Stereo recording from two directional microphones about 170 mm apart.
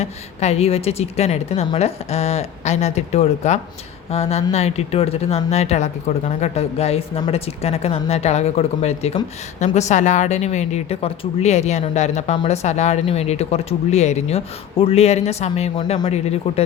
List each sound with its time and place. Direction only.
0.0 s speech: 40° left (ahead or behind)
15.7 s speech: 25° left (ahead or behind)